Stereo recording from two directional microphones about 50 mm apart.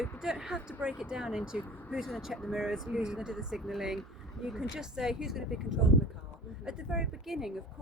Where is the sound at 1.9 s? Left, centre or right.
Centre.